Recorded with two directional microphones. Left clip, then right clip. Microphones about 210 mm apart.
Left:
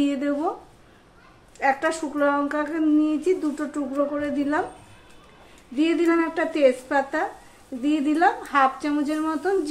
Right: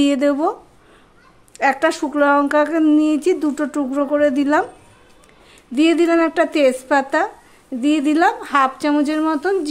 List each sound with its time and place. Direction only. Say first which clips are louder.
0.0 s speech: right 8 dB; 50° right (ahead or behind)
1.6 s speech: right 6 dB; 55° right (ahead or behind)
5.8 s speech: right 6 dB; 55° right (ahead or behind)